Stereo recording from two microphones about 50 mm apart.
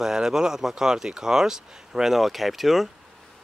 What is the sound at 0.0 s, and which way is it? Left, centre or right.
Speech, centre.